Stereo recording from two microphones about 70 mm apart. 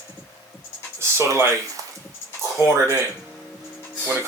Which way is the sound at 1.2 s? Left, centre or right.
Right.